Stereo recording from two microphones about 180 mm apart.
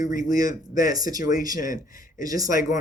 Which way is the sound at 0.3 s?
20° right (ahead or behind).